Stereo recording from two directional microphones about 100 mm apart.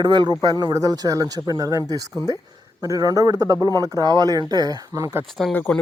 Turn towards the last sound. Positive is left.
turn(degrees=10)  # may be behind; listen again after turning